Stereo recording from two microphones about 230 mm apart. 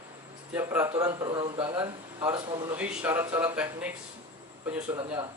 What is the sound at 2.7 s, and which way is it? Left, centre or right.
Speech, centre.